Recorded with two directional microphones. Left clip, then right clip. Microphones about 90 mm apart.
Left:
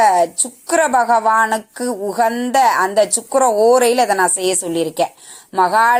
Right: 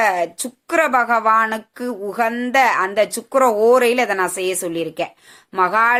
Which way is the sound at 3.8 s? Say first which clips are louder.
Left 3 dB; 25° left (ahead or behind).